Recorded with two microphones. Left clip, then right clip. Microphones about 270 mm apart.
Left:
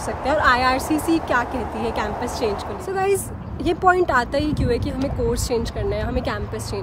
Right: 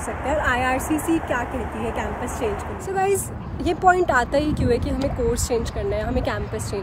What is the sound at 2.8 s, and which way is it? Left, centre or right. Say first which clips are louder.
Speech: even; centre.